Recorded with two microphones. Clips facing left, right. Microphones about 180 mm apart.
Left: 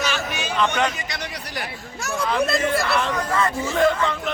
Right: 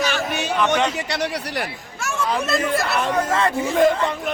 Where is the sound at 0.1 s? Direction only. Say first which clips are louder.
Right 3 dB; 60° right (ahead or behind).